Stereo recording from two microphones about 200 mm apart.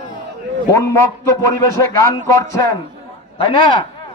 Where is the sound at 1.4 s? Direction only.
15° left (ahead or behind).